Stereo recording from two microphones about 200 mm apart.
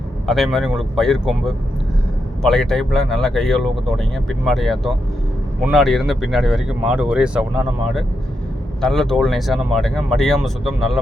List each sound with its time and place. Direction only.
0.3 s speech: centre (ahead or behind)